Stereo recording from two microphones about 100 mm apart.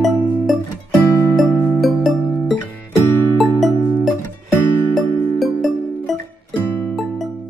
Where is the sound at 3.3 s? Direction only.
Centre (ahead or behind).